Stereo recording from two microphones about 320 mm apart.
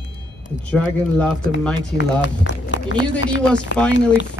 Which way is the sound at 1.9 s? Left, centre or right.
Left.